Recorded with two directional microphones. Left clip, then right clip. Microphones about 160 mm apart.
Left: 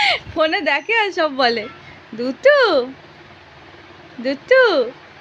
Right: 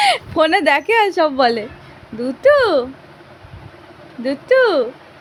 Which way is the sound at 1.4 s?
10° right (ahead or behind).